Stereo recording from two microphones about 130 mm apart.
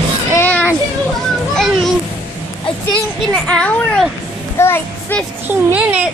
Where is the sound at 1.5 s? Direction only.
Centre (ahead or behind).